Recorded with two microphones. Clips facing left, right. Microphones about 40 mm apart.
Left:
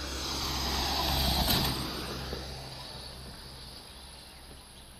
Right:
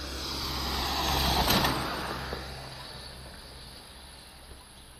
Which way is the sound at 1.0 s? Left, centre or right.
Centre.